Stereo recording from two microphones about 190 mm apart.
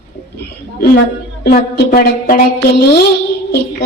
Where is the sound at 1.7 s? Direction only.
50° left (ahead or behind).